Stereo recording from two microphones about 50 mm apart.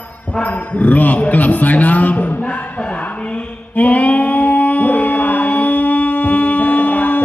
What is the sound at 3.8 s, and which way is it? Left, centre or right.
Singing, left.